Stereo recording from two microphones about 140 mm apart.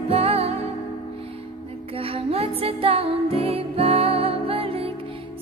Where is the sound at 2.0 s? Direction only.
45° right (ahead or behind).